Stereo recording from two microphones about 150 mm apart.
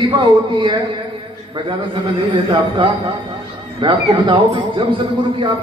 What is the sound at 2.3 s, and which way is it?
A man's voice, 35° right (ahead or behind).